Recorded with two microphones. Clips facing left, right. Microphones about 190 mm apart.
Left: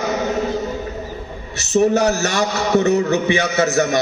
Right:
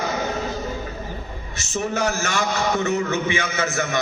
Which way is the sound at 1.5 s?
70° left (ahead or behind).